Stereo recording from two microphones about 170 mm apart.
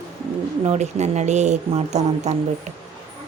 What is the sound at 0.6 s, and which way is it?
Speech, 40° right (ahead or behind).